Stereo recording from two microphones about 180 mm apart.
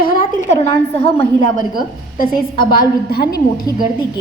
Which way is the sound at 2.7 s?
60° left (ahead or behind).